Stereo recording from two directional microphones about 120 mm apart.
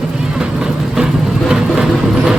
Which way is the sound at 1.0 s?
10° right (ahead or behind).